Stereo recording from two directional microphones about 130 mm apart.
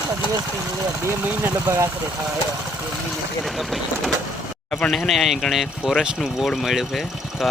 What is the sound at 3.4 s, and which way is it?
Speech, centre (ahead or behind).